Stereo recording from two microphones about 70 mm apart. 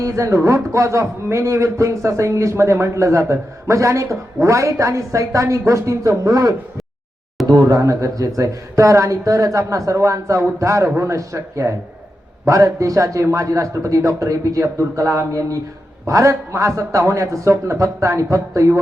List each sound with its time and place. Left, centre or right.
0.0 s a man's voice: right
7.6 s a man's voice: right